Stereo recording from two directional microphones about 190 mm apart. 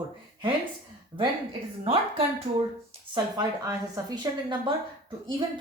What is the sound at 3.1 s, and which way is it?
Speech, 20° right (ahead or behind).